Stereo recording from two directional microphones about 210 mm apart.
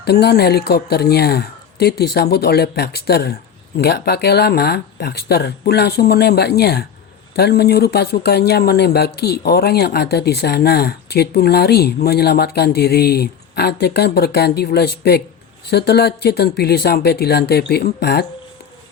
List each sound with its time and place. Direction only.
0.0 s speech: 50° left (ahead or behind)